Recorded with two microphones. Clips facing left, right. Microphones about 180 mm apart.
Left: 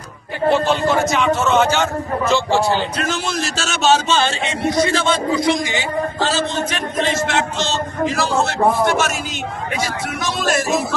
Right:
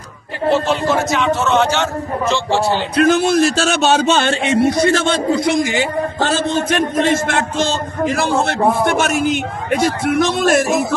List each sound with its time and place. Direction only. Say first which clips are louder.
0.7 s a man's voice: even; centre (ahead or behind)
2.9 s a man's voice: right 10 dB; 60° right (ahead or behind)